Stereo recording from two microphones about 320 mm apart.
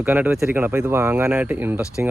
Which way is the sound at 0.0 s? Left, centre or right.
Centre.